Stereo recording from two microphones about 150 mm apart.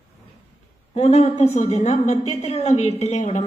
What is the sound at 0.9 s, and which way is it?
A woman's voice, 45° left (ahead or behind).